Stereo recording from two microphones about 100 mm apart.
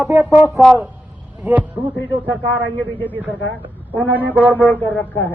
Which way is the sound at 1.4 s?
15° right (ahead or behind).